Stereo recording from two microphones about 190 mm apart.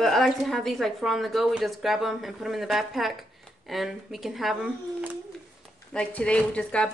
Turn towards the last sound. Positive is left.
turn(degrees=5)  # may be behind; listen again after turning